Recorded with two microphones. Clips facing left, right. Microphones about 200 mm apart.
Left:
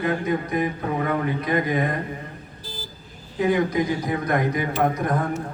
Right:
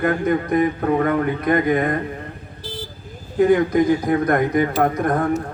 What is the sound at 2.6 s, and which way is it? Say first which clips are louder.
Vehicle: right 7 dB; 75° right (ahead or behind).